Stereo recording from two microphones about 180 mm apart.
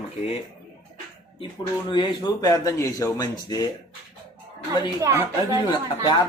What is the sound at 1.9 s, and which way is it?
Speech, 25° left (ahead or behind).